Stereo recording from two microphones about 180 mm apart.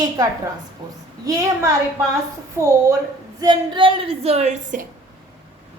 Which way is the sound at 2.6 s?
15° right (ahead or behind).